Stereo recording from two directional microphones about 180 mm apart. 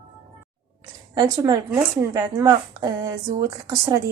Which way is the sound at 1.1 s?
20° right (ahead or behind).